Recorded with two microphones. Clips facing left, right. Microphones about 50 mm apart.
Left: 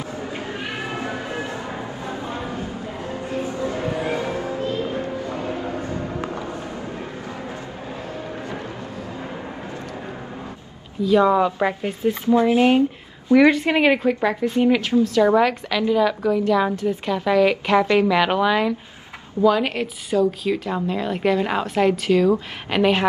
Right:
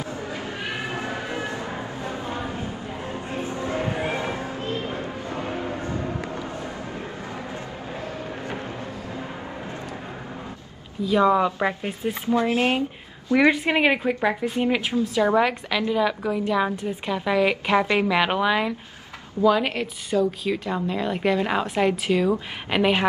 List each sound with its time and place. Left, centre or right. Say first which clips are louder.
0.2 s cat: left 2 dB; left
1.5 s music: left 1 dB; left
2.5 s a sound: left 2 dB; right
11.1 s speech: left 3 dB; centre
12.4 s speech: left 5 dB; left
13.3 s a woman's voice: left 4 dB; centre